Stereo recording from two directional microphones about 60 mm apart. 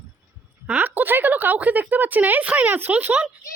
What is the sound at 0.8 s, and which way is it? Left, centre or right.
A woman's voice, right.